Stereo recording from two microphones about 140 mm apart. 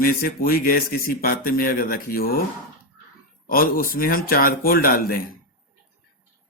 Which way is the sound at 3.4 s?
90° left.